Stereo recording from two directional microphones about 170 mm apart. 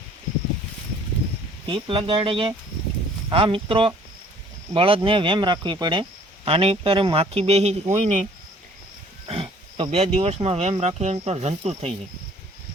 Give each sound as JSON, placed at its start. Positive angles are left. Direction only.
{"t": 1.6, "sound": "speech", "side_deg": -30}
{"t": 9.2, "sound": "speech", "side_deg": -30}